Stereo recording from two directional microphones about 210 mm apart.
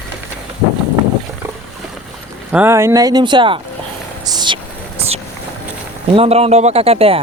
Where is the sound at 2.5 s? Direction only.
10° right (ahead or behind).